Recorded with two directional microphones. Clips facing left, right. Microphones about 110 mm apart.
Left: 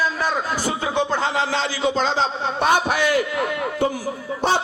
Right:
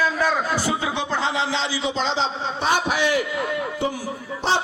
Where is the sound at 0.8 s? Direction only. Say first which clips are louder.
Left 3 dB; 45° left (ahead or behind).